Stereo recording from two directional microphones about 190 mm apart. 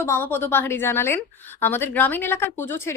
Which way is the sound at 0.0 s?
15° left (ahead or behind).